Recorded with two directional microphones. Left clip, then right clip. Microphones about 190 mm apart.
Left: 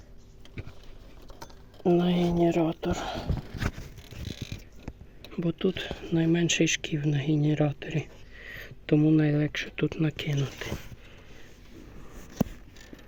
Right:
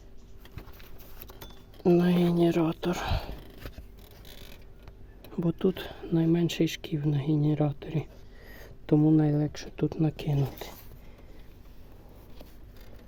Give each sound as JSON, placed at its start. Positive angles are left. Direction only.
{"t": 1.8, "sound": "speech", "side_deg": -5}
{"t": 2.9, "sound": "speech", "side_deg": -15}
{"t": 5.3, "sound": "speech", "side_deg": -10}